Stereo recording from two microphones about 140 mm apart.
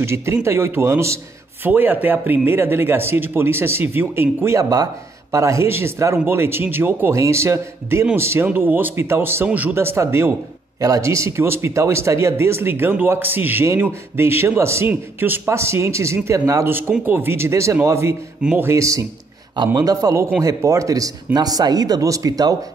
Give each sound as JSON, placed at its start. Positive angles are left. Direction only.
{"t": 0.0, "sound": "a man's voice", "side_deg": -20}
{"t": 18.4, "sound": "a man's voice", "side_deg": -10}
{"t": 18.7, "sound": "speech", "side_deg": -20}